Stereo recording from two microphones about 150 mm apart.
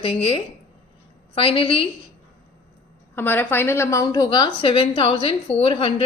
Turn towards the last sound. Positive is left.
turn(degrees=40)  # may be behind; listen again after turning